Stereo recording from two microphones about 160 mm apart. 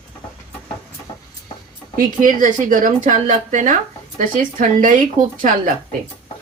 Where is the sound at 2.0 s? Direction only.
55° right (ahead or behind).